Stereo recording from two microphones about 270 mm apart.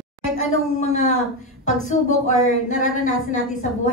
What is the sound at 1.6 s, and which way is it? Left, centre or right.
Speech, left.